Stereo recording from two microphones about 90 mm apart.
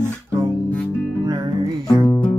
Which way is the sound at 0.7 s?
15° left (ahead or behind).